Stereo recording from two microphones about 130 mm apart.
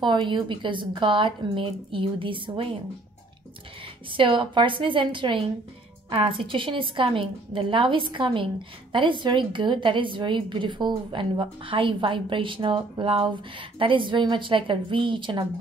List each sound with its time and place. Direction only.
0.0 s a woman's voice: 40° right (ahead or behind)
4.1 s a woman's voice: 40° right (ahead or behind)